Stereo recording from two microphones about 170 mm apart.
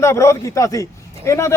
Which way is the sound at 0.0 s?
15° left (ahead or behind).